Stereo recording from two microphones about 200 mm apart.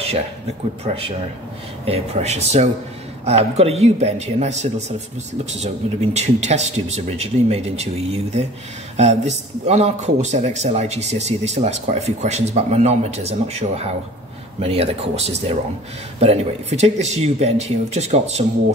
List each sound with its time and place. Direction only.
1.9 s speech: 35° right (ahead or behind)